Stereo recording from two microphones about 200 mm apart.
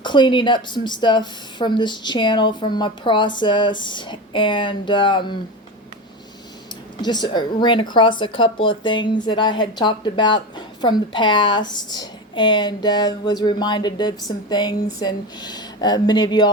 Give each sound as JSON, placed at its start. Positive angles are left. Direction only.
{"t": 0.0, "sound": "speech", "side_deg": 25}
{"t": 7.0, "sound": "speech", "side_deg": 20}